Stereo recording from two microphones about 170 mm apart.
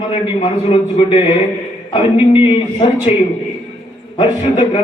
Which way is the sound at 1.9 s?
30° left (ahead or behind).